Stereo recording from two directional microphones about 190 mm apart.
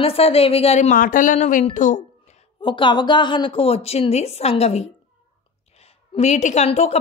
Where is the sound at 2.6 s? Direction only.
25° left (ahead or behind).